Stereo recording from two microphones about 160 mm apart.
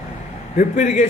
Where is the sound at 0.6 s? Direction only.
55° left (ahead or behind).